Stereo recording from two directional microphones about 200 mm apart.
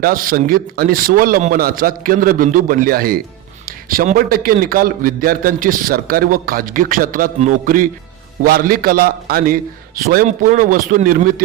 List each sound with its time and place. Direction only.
0.0 s a man's voice: 45° right (ahead or behind)